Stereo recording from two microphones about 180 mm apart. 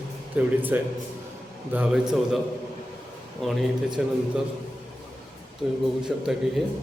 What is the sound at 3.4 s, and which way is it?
Speech, centre (ahead or behind).